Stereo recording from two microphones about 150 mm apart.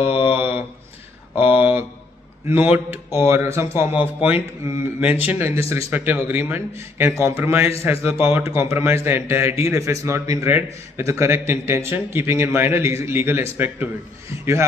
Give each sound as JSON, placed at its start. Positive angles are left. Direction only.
{"t": 0.0, "sound": "mantra", "side_deg": 40}
{"t": 1.3, "sound": "a sound", "side_deg": -10}
{"t": 2.4, "sound": "a man's voice", "side_deg": -10}